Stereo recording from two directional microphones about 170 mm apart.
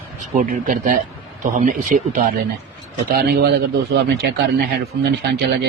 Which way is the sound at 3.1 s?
70° right (ahead or behind).